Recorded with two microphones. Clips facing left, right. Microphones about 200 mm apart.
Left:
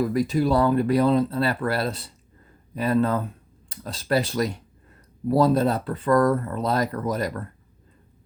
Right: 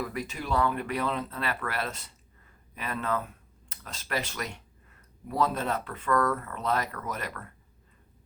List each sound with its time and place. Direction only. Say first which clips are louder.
0.0 s speech: left 13 dB; 35° left (ahead or behind)